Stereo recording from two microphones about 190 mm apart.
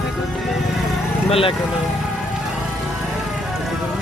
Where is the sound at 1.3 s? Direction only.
30° left (ahead or behind).